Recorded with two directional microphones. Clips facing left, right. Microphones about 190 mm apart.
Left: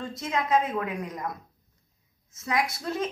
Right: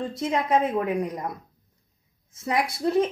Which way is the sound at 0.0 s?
30° right (ahead or behind).